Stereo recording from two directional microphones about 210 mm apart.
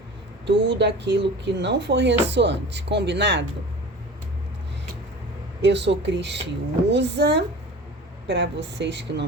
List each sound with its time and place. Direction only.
0.4 s speech: 55° right (ahead or behind)
5.6 s speech: 55° right (ahead or behind)